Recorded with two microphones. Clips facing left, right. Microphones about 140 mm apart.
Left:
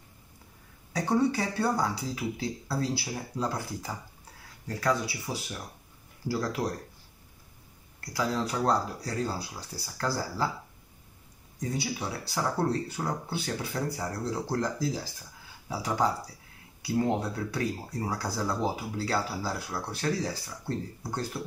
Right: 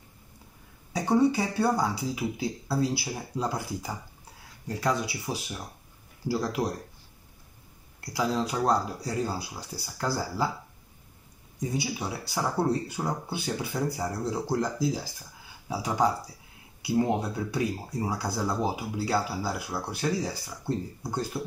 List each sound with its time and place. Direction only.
0.9 s speech: 15° right (ahead or behind)
8.1 s speech: 15° right (ahead or behind)
11.6 s speech: 15° right (ahead or behind)